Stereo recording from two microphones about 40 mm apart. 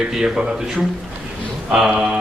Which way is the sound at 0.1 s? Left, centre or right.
Centre.